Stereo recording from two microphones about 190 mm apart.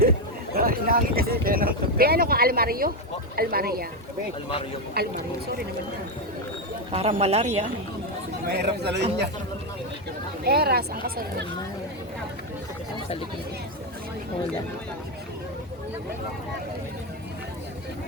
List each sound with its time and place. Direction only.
0.5 s speech: 50° right (ahead or behind)
5.0 s speech: 55° right (ahead or behind)
6.9 s speech: 35° right (ahead or behind)
8.4 s speech: 60° right (ahead or behind)
10.4 s speech: 55° right (ahead or behind)